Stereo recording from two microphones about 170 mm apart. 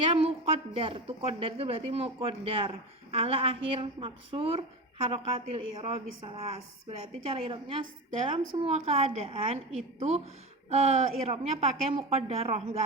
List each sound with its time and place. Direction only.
0.0 s a woman's voice: 35° right (ahead or behind)
10.7 s a woman's voice: 40° right (ahead or behind)